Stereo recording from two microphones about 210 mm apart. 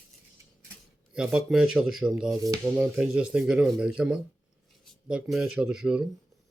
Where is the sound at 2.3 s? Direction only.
15° right (ahead or behind).